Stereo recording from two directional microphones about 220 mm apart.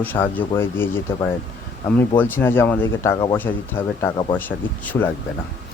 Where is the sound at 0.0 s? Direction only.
10° left (ahead or behind).